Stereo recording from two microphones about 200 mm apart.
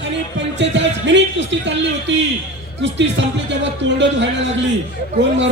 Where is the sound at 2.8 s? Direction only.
65° right (ahead or behind).